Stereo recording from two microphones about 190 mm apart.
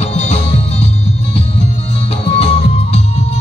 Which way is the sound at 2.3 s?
30° left (ahead or behind).